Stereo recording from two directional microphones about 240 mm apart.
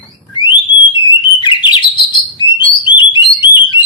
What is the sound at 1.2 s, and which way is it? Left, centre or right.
Bird, centre.